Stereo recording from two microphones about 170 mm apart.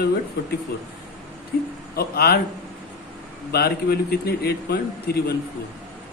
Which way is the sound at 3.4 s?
70° left (ahead or behind).